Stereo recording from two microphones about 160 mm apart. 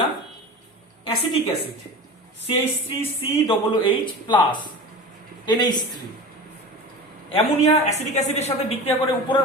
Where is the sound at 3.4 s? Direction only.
30° left (ahead or behind).